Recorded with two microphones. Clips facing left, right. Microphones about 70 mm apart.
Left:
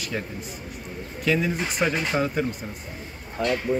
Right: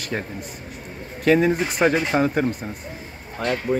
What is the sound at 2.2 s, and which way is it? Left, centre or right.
Speech, right.